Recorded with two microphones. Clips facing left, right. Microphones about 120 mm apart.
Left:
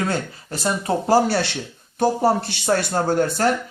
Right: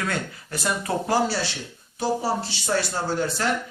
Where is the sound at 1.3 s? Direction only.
65° left (ahead or behind).